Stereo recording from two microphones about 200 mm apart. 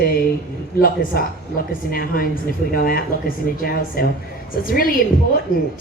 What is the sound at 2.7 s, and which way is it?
Speech, 45° left (ahead or behind).